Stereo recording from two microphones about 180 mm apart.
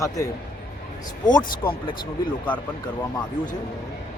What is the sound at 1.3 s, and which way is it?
Speech, 25° left (ahead or behind).